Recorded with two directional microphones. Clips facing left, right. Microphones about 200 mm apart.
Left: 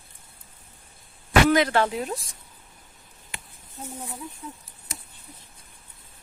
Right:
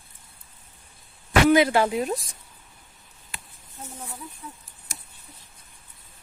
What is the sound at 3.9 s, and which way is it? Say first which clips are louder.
Speech: left 2 dB; 15° left (ahead or behind).